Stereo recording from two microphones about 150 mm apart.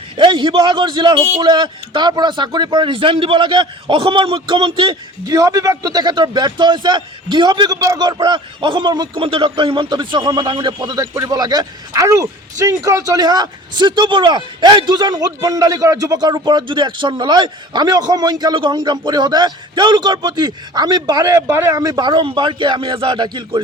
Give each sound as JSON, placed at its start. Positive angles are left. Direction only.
{"t": 0.2, "sound": "a man's voice", "side_deg": -35}